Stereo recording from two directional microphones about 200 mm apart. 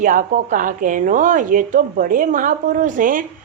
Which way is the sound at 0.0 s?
45° right (ahead or behind).